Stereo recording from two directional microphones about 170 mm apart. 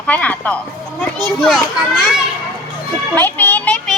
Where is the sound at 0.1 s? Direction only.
10° left (ahead or behind).